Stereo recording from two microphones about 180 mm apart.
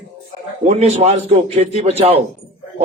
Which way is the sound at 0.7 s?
35° right (ahead or behind).